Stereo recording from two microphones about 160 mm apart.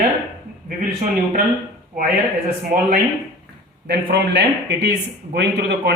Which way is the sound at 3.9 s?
90° right.